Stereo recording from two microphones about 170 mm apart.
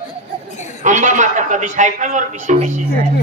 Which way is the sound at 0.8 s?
45° right (ahead or behind).